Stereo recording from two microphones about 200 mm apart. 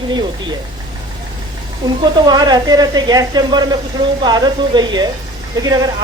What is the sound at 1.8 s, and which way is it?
Speech, 20° right (ahead or behind).